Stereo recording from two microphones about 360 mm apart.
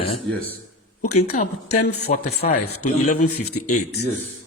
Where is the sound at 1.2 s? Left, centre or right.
Centre.